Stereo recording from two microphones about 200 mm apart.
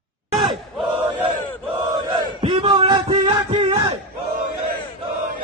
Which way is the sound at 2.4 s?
25° right (ahead or behind).